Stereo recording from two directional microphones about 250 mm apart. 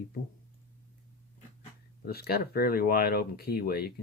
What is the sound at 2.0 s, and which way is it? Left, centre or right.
Speech, left.